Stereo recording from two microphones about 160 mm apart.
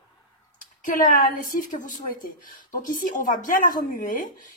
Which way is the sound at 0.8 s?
55° left (ahead or behind).